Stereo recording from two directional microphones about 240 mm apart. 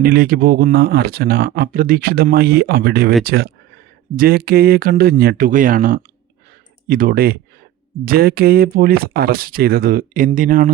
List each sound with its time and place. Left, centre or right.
0.0 s speech: right